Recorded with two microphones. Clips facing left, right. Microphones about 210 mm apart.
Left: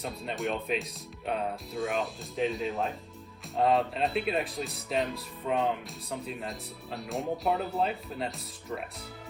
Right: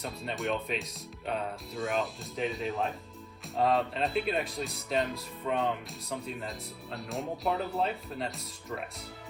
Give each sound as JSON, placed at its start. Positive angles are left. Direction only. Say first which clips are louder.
{"t": 0.0, "sound": "speech", "louder": "left 1 dB", "side_deg": 0}